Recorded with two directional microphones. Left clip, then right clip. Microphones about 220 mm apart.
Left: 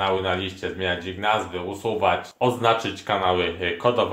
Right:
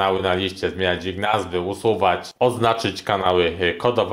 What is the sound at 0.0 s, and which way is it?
Speech, 45° right (ahead or behind).